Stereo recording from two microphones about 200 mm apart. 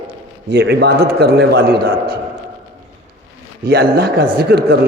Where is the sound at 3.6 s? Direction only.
50° right (ahead or behind).